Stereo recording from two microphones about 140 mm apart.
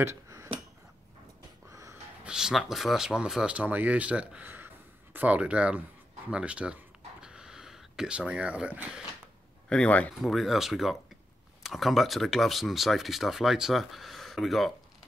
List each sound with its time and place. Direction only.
0.0 s a sound: 20° right (ahead or behind)
1.7 s wheeze: 25° right (ahead or behind)
2.2 s speech: 5° right (ahead or behind)
6.3 s a sound: 10° right (ahead or behind)
9.7 s speech: 10° left (ahead or behind)
10.1 s speech: centre (ahead or behind)